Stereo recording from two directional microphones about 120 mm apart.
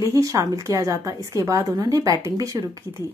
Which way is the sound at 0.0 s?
25° right (ahead or behind).